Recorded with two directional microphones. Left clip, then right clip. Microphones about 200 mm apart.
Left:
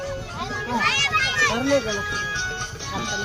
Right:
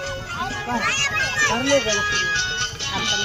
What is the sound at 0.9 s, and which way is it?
Children playing, 50° left (ahead or behind).